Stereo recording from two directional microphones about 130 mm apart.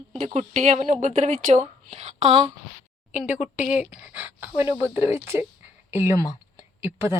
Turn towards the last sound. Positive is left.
turn(degrees=-20)  # may be behind; listen again after turning